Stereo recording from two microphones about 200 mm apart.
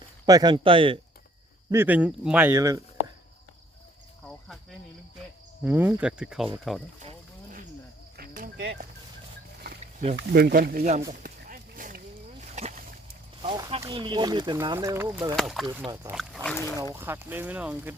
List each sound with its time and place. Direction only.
0.3 s speech: 20° right (ahead or behind)
1.7 s speech: 10° right (ahead or behind)
5.6 s speech: 10° right (ahead or behind)
8.1 s a sound: 50° right (ahead or behind)
9.8 s a sound: 30° right (ahead or behind)
10.2 s speech: 50° right (ahead or behind)
11.1 s a sound: 45° right (ahead or behind); by 13.8 s 30° right (ahead or behind)
13.8 s speech: 25° right (ahead or behind)
15.4 s speech: centre (ahead or behind)
15.8 s speech: 20° right (ahead or behind)
16.1 s speech: centre (ahead or behind)
16.9 s speech: 10° right (ahead or behind)